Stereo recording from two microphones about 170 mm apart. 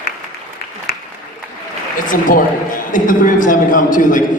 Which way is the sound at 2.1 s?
50° left (ahead or behind).